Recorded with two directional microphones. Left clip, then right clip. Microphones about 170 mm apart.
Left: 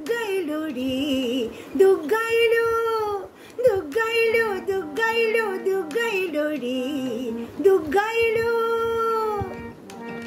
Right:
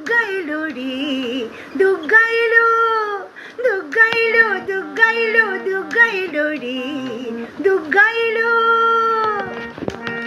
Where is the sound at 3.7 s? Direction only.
40° left (ahead or behind).